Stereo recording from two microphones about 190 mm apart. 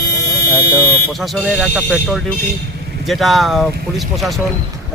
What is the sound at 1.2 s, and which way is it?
Speech, centre (ahead or behind).